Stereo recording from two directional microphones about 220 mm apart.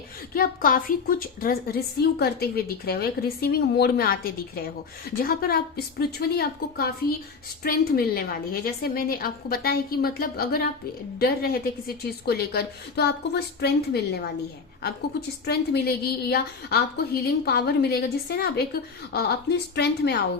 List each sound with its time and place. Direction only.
0.3 s a woman's voice: 40° left (ahead or behind)
15.4 s a woman's voice: 45° left (ahead or behind)